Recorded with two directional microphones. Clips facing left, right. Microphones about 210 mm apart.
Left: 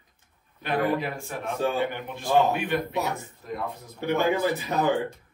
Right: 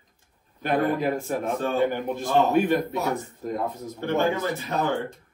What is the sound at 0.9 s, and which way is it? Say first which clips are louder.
A man's voice: right 3 dB; 45° right (ahead or behind).